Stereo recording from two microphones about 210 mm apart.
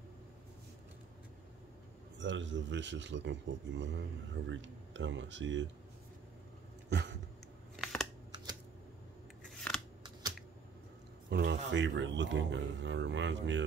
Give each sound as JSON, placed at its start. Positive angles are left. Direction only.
{"t": 2.1, "sound": "a man's voice", "side_deg": -60}
{"t": 6.9, "sound": "a sound", "side_deg": -55}
{"t": 7.7, "sound": "scissors", "side_deg": 0}
{"t": 11.2, "sound": "a man's voice", "side_deg": -55}